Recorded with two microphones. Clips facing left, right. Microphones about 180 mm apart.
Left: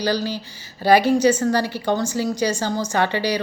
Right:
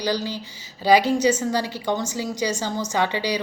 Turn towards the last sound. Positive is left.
turn(degrees=-15)  # may be behind; listen again after turning